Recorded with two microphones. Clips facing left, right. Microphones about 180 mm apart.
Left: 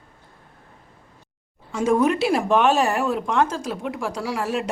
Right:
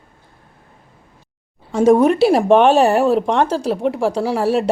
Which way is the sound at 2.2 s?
35° right (ahead or behind).